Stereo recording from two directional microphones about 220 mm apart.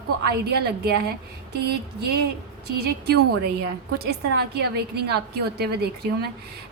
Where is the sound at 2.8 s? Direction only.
45° right (ahead or behind).